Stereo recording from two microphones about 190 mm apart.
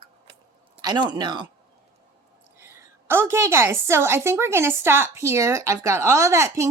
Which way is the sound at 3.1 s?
10° right (ahead or behind).